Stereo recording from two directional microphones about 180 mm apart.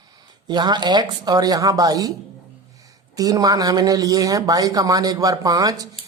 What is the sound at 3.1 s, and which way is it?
Speech, 20° right (ahead or behind).